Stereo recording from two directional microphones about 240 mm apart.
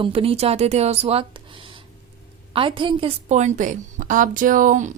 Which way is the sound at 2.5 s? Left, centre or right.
Right.